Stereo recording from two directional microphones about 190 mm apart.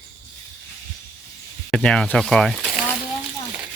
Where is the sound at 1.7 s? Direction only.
5° left (ahead or behind).